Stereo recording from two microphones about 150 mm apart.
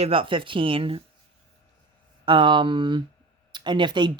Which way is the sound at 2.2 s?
35° right (ahead or behind).